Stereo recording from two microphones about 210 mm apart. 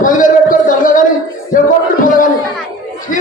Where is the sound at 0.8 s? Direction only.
40° left (ahead or behind).